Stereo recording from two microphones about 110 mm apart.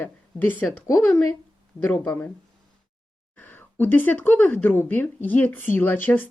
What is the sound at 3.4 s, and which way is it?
Speech, 20° left (ahead or behind).